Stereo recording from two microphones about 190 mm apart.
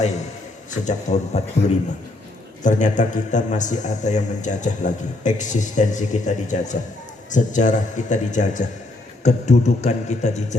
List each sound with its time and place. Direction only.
0.7 s a man's voice: 40° left (ahead or behind)
2.6 s a man's voice: 40° left (ahead or behind)